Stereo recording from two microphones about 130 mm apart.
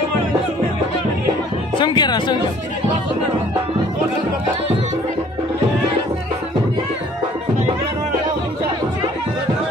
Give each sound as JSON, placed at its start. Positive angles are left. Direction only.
{"t": 1.8, "sound": "speech", "side_deg": 35}